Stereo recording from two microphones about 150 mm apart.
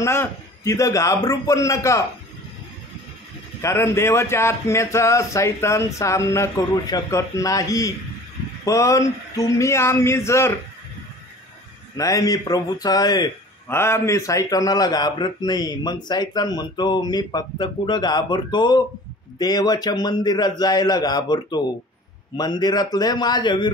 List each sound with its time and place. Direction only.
0.0 s a man's voice: 20° left (ahead or behind)
3.6 s a man's voice: 15° left (ahead or behind)
12.0 s a man's voice: 20° left (ahead or behind)